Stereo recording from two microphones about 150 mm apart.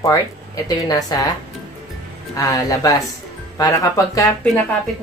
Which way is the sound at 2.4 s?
25° left (ahead or behind).